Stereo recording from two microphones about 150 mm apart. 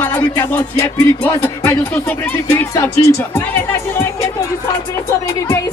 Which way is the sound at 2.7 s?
15° left (ahead or behind).